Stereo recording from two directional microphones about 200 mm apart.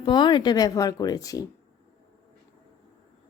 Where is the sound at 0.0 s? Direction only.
20° left (ahead or behind).